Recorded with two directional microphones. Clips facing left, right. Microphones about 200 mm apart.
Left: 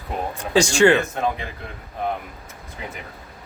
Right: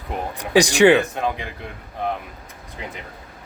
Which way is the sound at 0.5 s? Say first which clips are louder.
Right 2 dB; 15° right (ahead or behind).